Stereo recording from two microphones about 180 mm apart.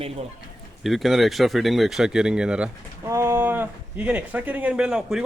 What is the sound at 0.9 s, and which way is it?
Speech, centre (ahead or behind).